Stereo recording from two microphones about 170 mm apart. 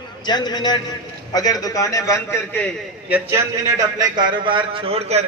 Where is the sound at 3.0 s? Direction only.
10° right (ahead or behind).